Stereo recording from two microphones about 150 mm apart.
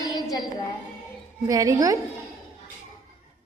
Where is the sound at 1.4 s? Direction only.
20° right (ahead or behind).